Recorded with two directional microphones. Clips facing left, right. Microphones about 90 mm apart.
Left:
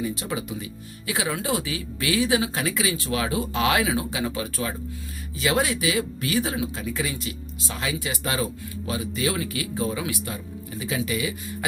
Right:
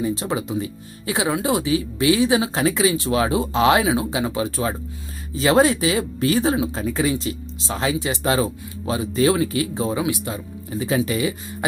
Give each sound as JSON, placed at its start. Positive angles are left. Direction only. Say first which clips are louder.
{"t": 0.0, "sound": "speech", "louder": "right 5 dB", "side_deg": -30}